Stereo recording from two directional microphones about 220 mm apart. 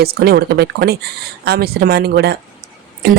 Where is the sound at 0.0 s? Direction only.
45° right (ahead or behind).